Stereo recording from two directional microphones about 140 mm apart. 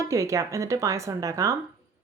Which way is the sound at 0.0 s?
20° right (ahead or behind).